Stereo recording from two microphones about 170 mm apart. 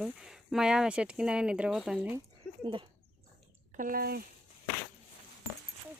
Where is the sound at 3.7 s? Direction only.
55° right (ahead or behind).